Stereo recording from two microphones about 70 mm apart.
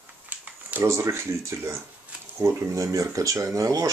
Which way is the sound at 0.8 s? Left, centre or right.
Right.